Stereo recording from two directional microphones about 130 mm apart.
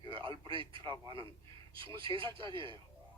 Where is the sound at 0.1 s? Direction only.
40° right (ahead or behind).